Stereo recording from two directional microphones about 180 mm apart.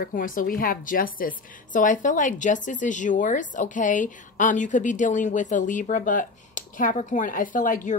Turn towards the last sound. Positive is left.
turn(degrees=45)  # may be behind; listen again after turning